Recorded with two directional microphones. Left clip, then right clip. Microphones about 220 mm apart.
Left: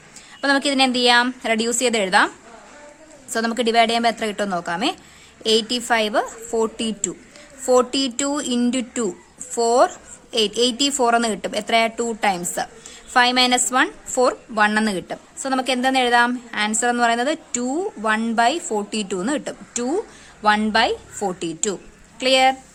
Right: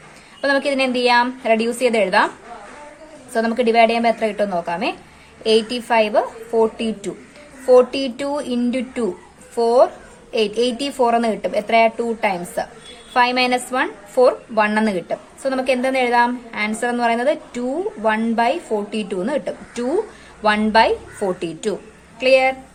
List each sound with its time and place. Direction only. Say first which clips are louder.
0.4 s a woman's voice: even; 35° left (ahead or behind)
3.3 s a woman's voice: right 2 dB; 35° left (ahead or behind)